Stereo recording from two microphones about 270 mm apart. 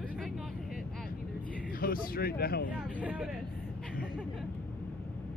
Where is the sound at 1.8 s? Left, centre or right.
Left.